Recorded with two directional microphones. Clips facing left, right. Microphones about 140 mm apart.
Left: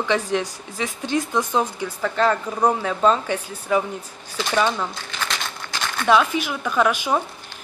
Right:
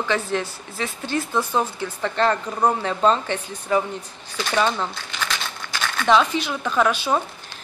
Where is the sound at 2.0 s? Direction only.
5° left (ahead or behind).